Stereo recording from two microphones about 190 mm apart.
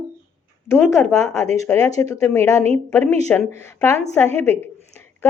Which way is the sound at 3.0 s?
35° right (ahead or behind).